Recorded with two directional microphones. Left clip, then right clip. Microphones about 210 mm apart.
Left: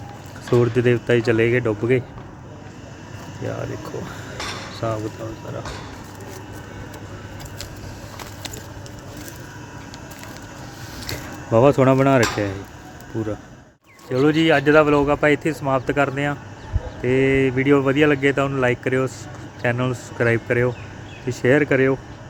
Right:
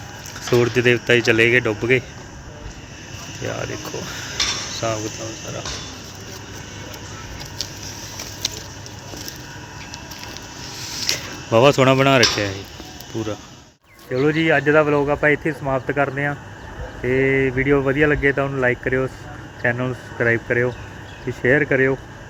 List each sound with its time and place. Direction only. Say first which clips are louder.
0.5 s speech: right 1 dB; centre (ahead or behind)
3.4 s speech: right 2 dB; 5° right (ahead or behind)
11.1 s speech: right 2 dB; centre (ahead or behind)
14.1 s speech: left 1 dB; 15° left (ahead or behind)